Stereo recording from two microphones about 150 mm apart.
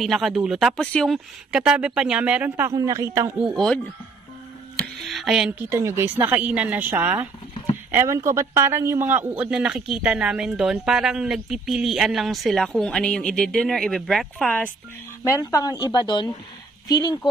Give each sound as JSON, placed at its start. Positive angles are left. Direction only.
{"t": 0.0, "sound": "a man's voice", "side_deg": 0}
{"t": 3.3, "sound": "a man's voice", "side_deg": 0}
{"t": 4.7, "sound": "music", "side_deg": 0}
{"t": 5.6, "sound": "a man's voice", "side_deg": -15}
{"t": 15.2, "sound": "speech", "side_deg": 20}